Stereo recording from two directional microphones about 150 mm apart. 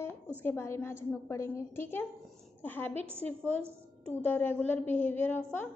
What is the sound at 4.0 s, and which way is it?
A woman's voice, 10° left (ahead or behind).